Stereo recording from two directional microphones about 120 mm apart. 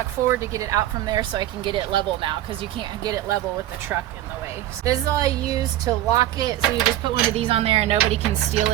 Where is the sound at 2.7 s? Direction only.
35° right (ahead or behind).